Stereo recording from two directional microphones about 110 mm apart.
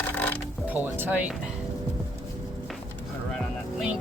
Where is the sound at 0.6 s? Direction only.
15° right (ahead or behind).